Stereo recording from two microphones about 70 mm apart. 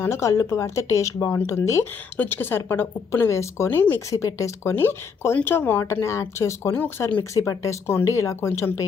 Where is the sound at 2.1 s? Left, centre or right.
Left.